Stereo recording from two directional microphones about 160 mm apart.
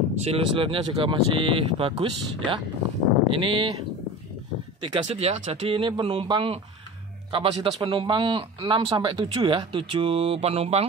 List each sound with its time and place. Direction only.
0.2 s speech: 35° right (ahead or behind)
5.0 s speech: 40° right (ahead or behind)